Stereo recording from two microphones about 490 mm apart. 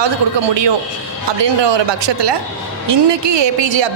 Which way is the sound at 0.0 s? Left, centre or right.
Right.